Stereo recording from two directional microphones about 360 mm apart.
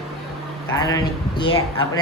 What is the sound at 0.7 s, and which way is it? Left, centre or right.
Speech, centre.